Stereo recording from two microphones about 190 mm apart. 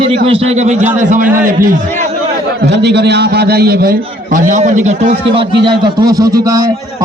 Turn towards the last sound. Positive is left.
turn(degrees=-20)  # may be behind; listen again after turning